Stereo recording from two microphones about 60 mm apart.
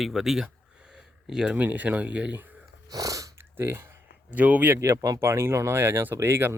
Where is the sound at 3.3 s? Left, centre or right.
Right.